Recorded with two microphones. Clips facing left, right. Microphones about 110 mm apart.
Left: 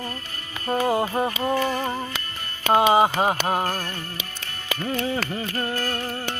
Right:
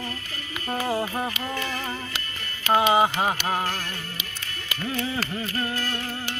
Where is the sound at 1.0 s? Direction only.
25° left (ahead or behind).